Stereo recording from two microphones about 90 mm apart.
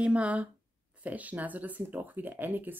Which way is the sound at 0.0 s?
15° right (ahead or behind).